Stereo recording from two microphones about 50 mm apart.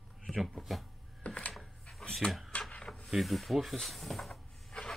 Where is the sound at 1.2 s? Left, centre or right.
Left.